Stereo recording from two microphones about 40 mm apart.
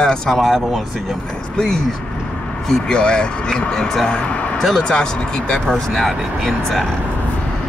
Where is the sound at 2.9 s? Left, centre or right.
Left.